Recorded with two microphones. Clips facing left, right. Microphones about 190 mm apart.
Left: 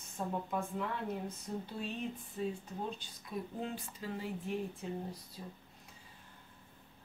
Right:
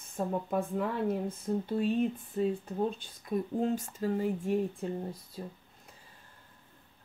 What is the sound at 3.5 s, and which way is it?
Speech, 45° right (ahead or behind).